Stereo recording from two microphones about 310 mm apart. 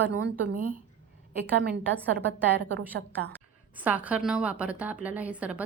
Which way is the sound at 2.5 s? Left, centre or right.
Right.